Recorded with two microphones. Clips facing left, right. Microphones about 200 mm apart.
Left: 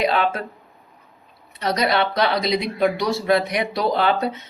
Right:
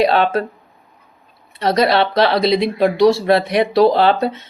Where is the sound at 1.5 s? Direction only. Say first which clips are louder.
Right 6 dB; 30° right (ahead or behind).